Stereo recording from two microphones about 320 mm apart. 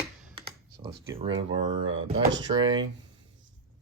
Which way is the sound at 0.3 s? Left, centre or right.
Centre.